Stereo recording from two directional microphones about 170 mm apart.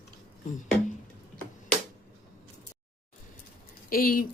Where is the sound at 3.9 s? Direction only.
55° left (ahead or behind).